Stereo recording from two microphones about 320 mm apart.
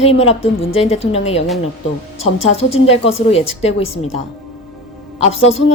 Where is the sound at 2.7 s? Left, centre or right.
Centre.